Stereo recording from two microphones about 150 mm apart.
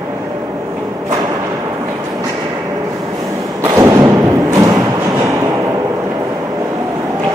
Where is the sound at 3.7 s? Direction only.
20° right (ahead or behind).